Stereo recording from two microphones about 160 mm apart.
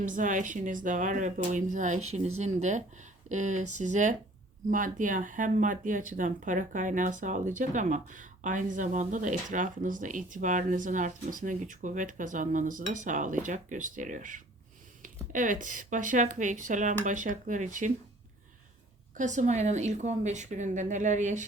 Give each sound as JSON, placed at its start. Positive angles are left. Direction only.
{"t": 0.0, "sound": "speech", "side_deg": -55}
{"t": 19.1, "sound": "speech", "side_deg": -50}